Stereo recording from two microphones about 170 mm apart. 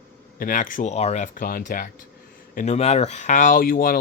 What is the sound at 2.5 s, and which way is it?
Speech, 45° left (ahead or behind).